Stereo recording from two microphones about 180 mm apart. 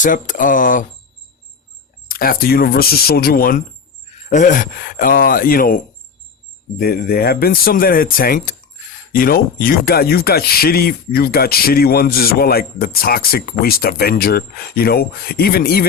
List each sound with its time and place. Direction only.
0.0 s speech: 45° left (ahead or behind)
2.0 s speech: 50° left (ahead or behind)